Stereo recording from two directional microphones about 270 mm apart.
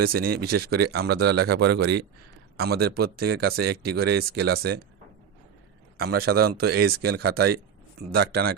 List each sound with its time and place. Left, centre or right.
0.6 s speech: right
6.0 s speech: right